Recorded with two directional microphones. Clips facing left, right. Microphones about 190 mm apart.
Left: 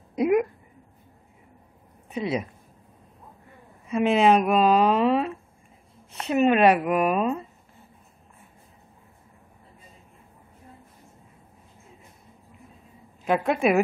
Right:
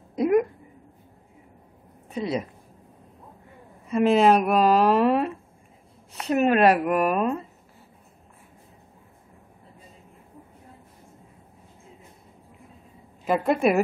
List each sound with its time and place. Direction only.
0.1 s a sound: 10° left (ahead or behind)
2.1 s speech: 5° left (ahead or behind)
3.9 s speech: centre (ahead or behind)
6.3 s speech: centre (ahead or behind)
13.2 s speech: centre (ahead or behind)